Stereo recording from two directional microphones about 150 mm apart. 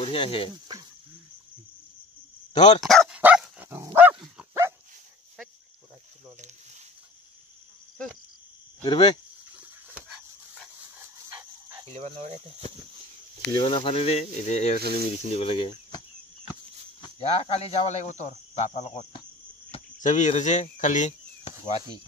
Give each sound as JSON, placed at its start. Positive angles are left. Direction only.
{"t": 0.0, "sound": "speech", "side_deg": 35}
{"t": 2.5, "sound": "speech", "side_deg": 50}
{"t": 2.8, "sound": "speech", "side_deg": 0}
{"t": 3.2, "sound": "dog", "side_deg": -10}
{"t": 8.8, "sound": "speech", "side_deg": 35}
{"t": 9.6, "sound": "dog", "side_deg": -5}
{"t": 11.8, "sound": "speech", "side_deg": -45}
{"t": 13.6, "sound": "speech", "side_deg": 35}
{"t": 17.2, "sound": "speech", "side_deg": 40}